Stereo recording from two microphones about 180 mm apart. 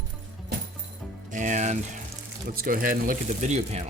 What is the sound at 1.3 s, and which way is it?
Speech, 45° right (ahead or behind).